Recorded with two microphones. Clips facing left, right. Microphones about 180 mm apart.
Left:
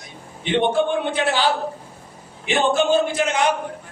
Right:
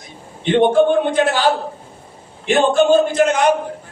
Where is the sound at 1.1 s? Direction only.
45° right (ahead or behind).